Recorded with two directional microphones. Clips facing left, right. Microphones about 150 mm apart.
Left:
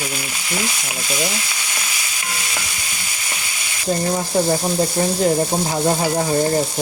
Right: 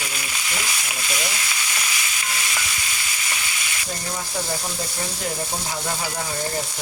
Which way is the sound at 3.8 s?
35° left (ahead or behind).